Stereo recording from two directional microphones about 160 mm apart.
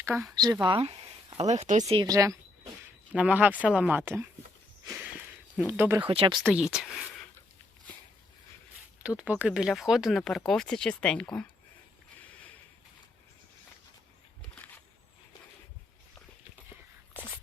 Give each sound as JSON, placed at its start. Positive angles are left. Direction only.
{"t": 0.3, "sound": "speech", "side_deg": -25}
{"t": 2.0, "sound": "a sound", "side_deg": -20}
{"t": 3.1, "sound": "speech", "side_deg": -5}
{"t": 5.6, "sound": "speech", "side_deg": -10}
{"t": 6.1, "sound": "speech", "side_deg": -30}
{"t": 6.4, "sound": "speech", "side_deg": -5}
{"t": 9.0, "sound": "speech", "side_deg": -10}